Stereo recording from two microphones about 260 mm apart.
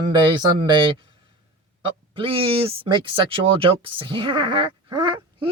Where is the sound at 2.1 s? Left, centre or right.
Right.